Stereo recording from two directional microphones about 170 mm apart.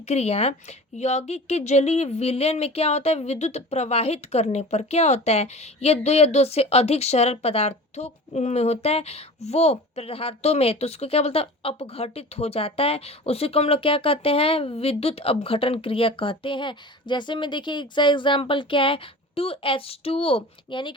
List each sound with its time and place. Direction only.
0.1 s speech: 40° left (ahead or behind)